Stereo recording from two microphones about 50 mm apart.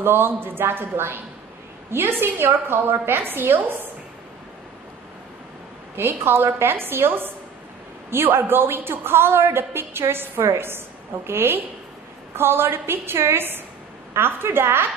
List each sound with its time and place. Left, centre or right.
0.0 s a woman's voice: right
5.9 s a woman's voice: right
10.4 s a woman's voice: right